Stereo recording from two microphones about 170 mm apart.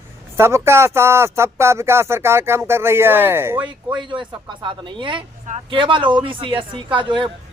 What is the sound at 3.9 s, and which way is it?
Speech, 30° right (ahead or behind).